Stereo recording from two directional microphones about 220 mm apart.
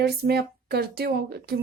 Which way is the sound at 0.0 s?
45° right (ahead or behind).